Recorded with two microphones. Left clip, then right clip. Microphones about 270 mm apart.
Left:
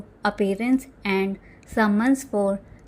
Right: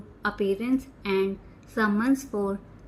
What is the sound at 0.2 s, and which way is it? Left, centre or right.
A woman's voice, left.